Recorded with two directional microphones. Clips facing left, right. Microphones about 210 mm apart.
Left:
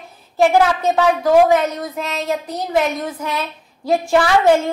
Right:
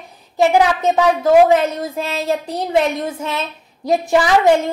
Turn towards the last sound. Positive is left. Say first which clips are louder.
# even
turn(degrees=-15)  # may be behind; listen again after turning